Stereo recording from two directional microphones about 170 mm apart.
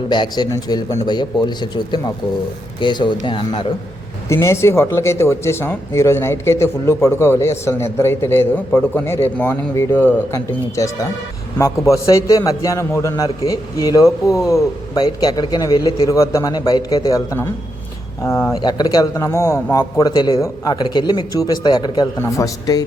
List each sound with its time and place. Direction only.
0.1 s a man's voice: 25° left (ahead or behind)
4.4 s a man's voice: 15° left (ahead or behind)
20.0 s a man's voice: 25° left (ahead or behind)